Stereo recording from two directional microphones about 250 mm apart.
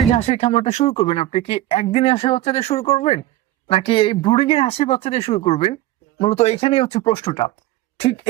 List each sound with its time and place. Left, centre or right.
0.1 s speech: left